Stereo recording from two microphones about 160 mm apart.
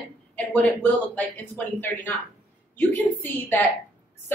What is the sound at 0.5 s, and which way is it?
Speech, 10° left (ahead or behind).